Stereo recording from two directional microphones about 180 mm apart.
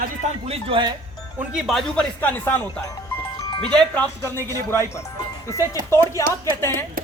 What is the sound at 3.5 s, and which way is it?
Music, 30° left (ahead or behind).